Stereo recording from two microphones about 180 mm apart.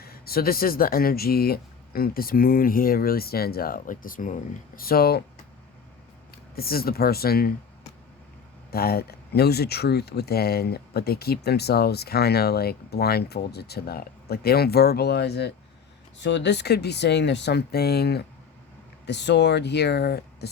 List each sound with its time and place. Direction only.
0.0 s speech: 55° left (ahead or behind)
6.3 s speech: 55° left (ahead or behind)
8.7 s speech: 60° left (ahead or behind)
16.1 s speech: 80° left; by 20.5 s 65° left (ahead or behind)